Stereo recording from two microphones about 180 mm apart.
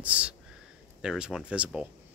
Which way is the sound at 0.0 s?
5° right (ahead or behind).